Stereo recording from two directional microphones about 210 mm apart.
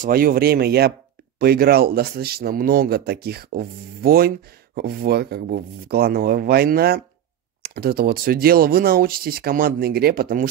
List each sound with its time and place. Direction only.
0.0 s a man's voice: 45° right (ahead or behind)